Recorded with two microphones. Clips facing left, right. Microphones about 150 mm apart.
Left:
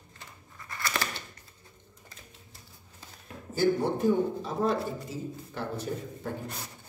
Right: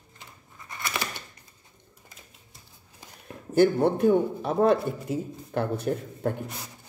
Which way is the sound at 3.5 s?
60° right (ahead or behind).